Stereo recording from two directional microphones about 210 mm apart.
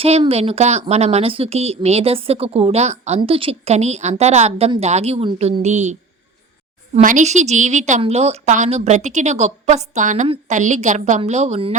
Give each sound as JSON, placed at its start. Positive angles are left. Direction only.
{"t": 0.0, "sound": "a woman's voice", "side_deg": -30}